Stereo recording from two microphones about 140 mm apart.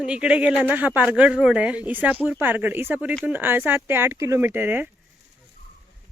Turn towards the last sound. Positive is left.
turn(degrees=-15)  # may be behind; listen again after turning